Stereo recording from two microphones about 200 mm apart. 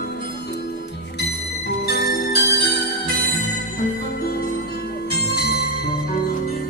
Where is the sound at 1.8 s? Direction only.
50° left (ahead or behind).